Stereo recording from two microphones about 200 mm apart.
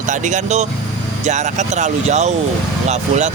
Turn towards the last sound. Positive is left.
turn(degrees=-35)  # may be behind; listen again after turning